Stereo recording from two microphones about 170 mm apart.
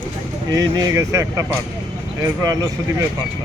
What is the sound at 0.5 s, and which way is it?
Speech, 20° right (ahead or behind).